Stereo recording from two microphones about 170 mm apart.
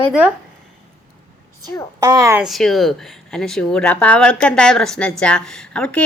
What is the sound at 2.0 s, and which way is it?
Speech, 20° right (ahead or behind).